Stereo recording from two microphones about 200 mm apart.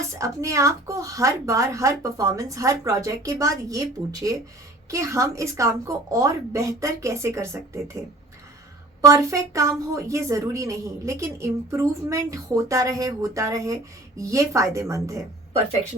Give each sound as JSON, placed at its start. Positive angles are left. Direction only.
{"t": 0.2, "sound": "a woman's voice", "side_deg": -15}
{"t": 9.0, "sound": "a woman's voice", "side_deg": -15}